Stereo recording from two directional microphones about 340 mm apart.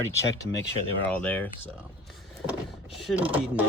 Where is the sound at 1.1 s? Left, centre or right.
Centre.